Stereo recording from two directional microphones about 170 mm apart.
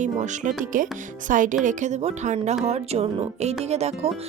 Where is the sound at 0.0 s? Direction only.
45° right (ahead or behind).